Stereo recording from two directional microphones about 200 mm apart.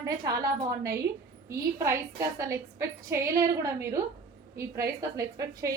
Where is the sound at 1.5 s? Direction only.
15° right (ahead or behind).